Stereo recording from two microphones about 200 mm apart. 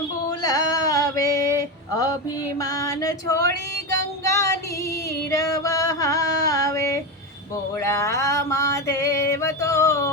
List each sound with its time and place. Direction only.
0.3 s music: 20° left (ahead or behind)
2.6 s music: 15° left (ahead or behind)
4.2 s child singing: 15° left (ahead or behind)
5.6 s music: 15° left (ahead or behind)
7.8 s a sound: 15° left (ahead or behind)